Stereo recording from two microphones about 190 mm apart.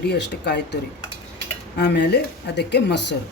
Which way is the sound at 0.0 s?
60° left (ahead or behind).